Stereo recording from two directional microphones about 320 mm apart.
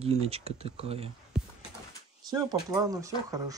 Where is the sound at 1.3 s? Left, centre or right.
Centre.